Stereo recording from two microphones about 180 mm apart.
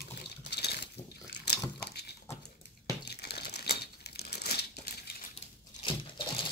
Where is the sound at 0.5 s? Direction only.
65° left (ahead or behind).